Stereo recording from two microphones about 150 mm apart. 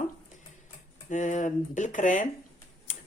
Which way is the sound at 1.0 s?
55° left (ahead or behind).